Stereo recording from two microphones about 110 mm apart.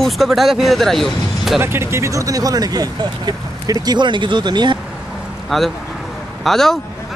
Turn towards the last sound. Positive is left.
turn(degrees=5)  # may be behind; listen again after turning